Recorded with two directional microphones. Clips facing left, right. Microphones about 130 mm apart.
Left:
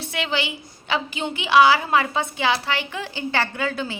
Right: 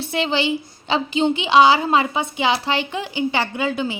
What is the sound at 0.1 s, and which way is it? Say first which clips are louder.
A woman's voice: right 6 dB; 30° right (ahead or behind).